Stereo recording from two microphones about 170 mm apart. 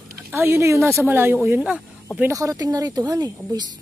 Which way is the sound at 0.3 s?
15° right (ahead or behind).